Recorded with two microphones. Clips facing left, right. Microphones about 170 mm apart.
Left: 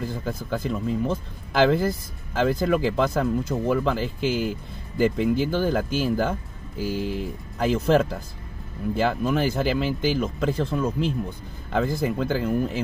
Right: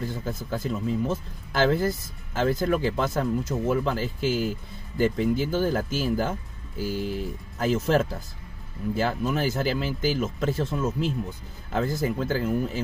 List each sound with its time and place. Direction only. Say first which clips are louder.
0.0 s speech: left 2 dB; centre (ahead or behind)
2.3 s speech: left 2 dB; centre (ahead or behind)